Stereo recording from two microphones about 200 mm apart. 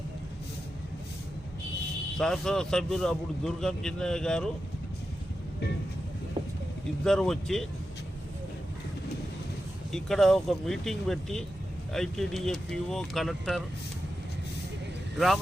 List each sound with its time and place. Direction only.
2.1 s a man's voice: centre (ahead or behind)
6.4 s vehicle: 25° right (ahead or behind)
7.0 s a man's voice: 5° left (ahead or behind)
9.9 s a man's voice: centre (ahead or behind)